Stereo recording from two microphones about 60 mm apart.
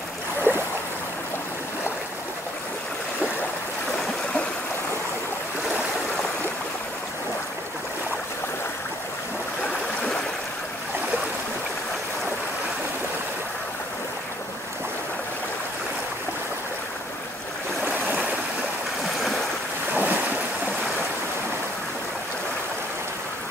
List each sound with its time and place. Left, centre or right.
0.4 s a sound: right
3.9 s boat: centre
17.8 s stream: right
19.1 s stream: centre
19.9 s waves: right